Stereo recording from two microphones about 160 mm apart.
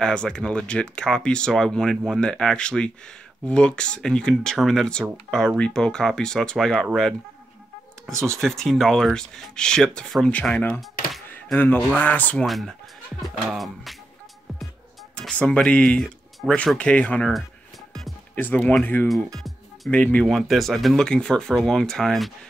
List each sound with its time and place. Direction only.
0.0 s speech: 5° left (ahead or behind)
8.4 s speech: centre (ahead or behind)
15.1 s speech: 5° left (ahead or behind)